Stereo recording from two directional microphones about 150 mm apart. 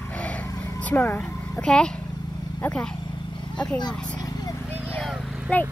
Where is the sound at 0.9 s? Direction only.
10° left (ahead or behind).